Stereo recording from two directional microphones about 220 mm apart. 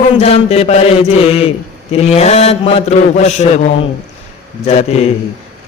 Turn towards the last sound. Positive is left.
turn(degrees=30)  # may be behind; listen again after turning